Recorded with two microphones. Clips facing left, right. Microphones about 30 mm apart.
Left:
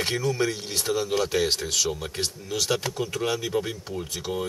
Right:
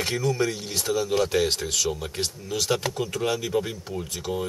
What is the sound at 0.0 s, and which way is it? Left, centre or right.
Speech, centre.